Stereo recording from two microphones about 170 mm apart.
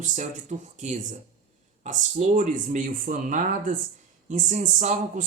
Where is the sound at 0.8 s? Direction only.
45° right (ahead or behind).